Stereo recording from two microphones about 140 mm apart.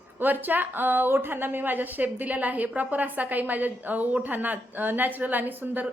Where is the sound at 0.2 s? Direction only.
15° right (ahead or behind).